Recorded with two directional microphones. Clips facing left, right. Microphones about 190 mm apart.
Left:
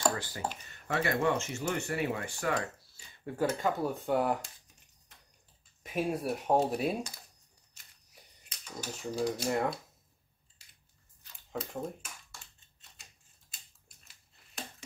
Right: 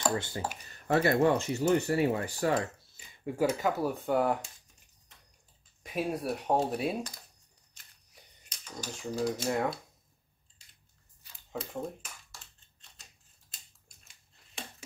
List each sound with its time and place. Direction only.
0.1 s speech: 25° right (ahead or behind)
0.7 s speech: 35° right (ahead or behind)
2.9 s speech: 10° right (ahead or behind)
5.9 s speech: centre (ahead or behind)
7.7 s typewriter: 5° left (ahead or behind)
11.3 s speech: centre (ahead or behind)